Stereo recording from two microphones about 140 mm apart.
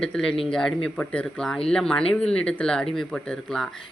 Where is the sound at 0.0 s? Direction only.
5° left (ahead or behind).